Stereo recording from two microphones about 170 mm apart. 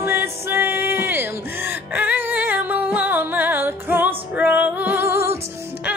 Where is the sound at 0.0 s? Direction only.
15° right (ahead or behind).